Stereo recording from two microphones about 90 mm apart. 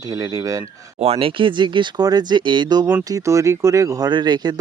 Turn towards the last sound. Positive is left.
turn(degrees=-55)  # may be behind; listen again after turning